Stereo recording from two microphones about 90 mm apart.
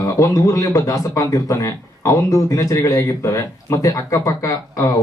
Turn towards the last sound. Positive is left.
turn(degrees=40)  # may be behind; listen again after turning